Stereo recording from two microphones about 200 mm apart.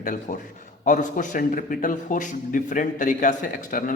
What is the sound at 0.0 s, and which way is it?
A man's voice, 40° left (ahead or behind).